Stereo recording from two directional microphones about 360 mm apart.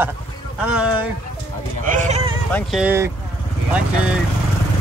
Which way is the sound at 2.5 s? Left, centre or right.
Centre.